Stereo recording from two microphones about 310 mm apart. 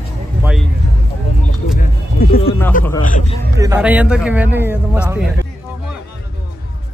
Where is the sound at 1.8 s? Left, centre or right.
Left.